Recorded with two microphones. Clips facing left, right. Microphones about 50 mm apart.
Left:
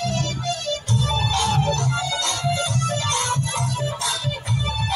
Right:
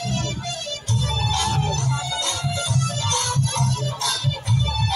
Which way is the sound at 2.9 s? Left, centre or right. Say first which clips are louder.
Left 2 dB; centre.